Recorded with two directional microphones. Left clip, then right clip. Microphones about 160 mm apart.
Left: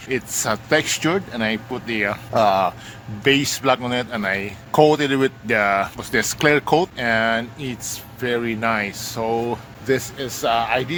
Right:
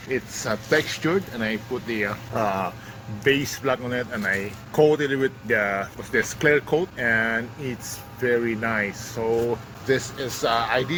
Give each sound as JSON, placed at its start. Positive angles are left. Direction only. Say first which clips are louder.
{"t": 0.1, "sound": "speech", "louder": "left 4 dB", "side_deg": 50}
{"t": 6.9, "sound": "speech", "louder": "left 3 dB", "side_deg": 35}
{"t": 10.5, "sound": "speech", "louder": "left 3 dB", "side_deg": 20}